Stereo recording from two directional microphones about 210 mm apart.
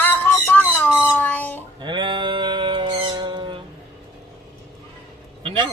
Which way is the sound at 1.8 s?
25° right (ahead or behind).